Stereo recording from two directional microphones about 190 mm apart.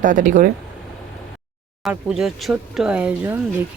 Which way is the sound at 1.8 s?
Centre (ahead or behind).